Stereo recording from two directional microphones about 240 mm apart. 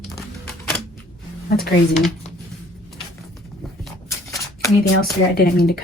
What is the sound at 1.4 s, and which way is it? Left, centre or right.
Speech, left.